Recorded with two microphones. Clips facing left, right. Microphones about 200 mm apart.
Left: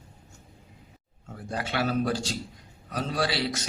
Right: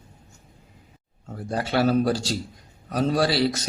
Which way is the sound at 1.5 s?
35° right (ahead or behind).